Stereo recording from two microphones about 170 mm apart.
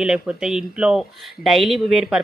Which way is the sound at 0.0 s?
5° right (ahead or behind).